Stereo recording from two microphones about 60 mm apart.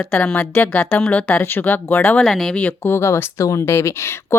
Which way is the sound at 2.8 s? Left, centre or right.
Left.